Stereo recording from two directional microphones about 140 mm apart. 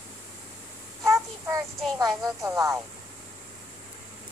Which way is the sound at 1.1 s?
20° right (ahead or behind).